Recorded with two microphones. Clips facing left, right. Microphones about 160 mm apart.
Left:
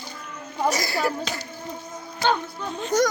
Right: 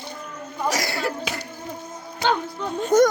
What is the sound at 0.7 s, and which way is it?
Speech, 75° right (ahead or behind).